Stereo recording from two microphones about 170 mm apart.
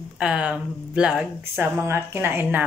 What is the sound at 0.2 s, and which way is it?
A woman's voice, 5° right (ahead or behind).